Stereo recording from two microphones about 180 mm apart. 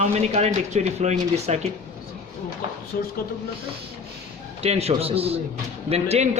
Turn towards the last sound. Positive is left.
turn(degrees=-35)  # may be behind; listen again after turning